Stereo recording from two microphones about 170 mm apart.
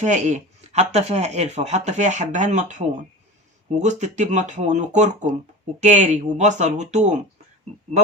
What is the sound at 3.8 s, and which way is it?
Speech, 45° right (ahead or behind).